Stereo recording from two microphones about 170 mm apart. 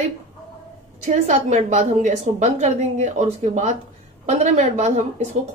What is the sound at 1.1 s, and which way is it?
A woman's voice, 45° right (ahead or behind).